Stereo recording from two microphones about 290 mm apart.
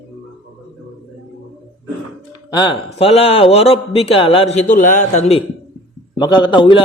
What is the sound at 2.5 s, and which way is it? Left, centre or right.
A man's voice, centre.